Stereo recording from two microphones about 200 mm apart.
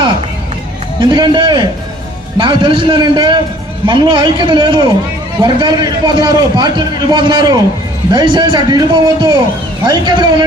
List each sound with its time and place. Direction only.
0.9 s a man's voice: 20° right (ahead or behind)